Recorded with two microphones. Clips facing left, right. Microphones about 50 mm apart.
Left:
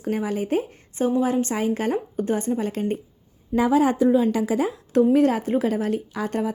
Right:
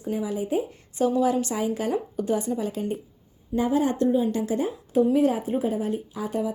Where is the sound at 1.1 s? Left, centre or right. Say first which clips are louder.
Left 3 dB; left.